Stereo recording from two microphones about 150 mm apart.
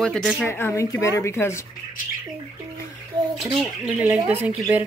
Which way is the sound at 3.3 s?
5° right (ahead or behind).